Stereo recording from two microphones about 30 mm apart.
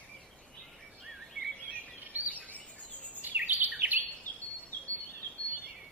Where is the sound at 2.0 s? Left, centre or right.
Right.